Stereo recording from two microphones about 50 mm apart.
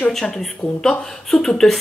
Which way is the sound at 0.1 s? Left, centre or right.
Centre.